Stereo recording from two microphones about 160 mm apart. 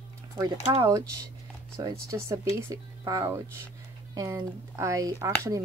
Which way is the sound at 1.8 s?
25° right (ahead or behind).